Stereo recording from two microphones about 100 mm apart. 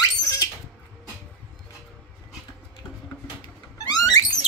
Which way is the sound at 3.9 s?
40° left (ahead or behind).